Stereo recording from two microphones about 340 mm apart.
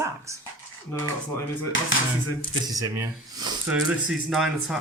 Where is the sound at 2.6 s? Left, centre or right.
Centre.